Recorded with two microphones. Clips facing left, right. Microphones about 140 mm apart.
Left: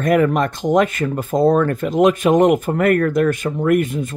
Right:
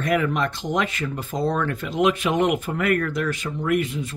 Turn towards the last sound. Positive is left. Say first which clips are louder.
# left 6 dB
turn(degrees=50)  # may be behind; listen again after turning